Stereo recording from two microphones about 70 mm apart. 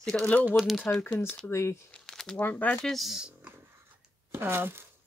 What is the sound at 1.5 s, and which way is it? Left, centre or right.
Speech, left.